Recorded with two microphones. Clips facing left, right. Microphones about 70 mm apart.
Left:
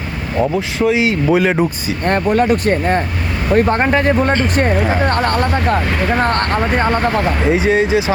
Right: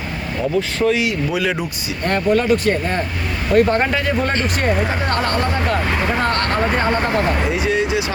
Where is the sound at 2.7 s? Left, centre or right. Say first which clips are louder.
Left 4 dB; left.